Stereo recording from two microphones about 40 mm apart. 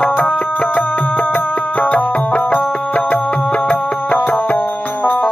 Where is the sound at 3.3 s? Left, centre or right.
Left.